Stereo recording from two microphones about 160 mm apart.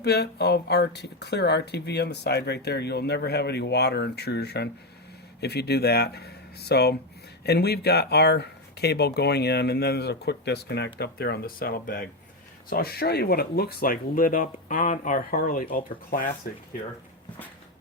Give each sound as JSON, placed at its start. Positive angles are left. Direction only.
{"t": 0.0, "sound": "speech", "side_deg": 90}